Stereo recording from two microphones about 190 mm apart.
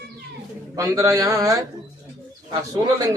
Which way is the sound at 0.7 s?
15° right (ahead or behind).